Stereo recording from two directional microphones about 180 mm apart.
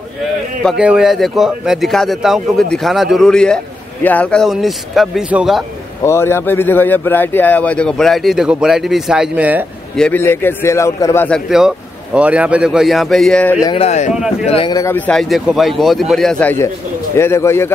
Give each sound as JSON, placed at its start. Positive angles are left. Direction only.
{"t": 0.7, "sound": "speech", "side_deg": -5}
{"t": 6.0, "sound": "speech", "side_deg": 15}
{"t": 9.9, "sound": "a man's voice", "side_deg": 10}
{"t": 11.2, "sound": "speech", "side_deg": 0}
{"t": 13.7, "sound": "speech", "side_deg": 35}
{"t": 14.7, "sound": "a man's voice", "side_deg": 15}